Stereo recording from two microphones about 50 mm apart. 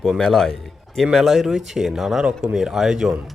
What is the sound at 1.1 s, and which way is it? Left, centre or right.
Speech, centre.